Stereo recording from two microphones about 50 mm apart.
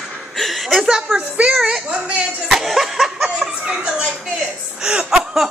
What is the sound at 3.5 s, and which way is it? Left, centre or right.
Speech, centre.